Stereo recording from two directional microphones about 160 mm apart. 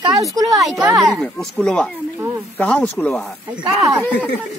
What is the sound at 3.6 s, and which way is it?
Speech, 20° right (ahead or behind).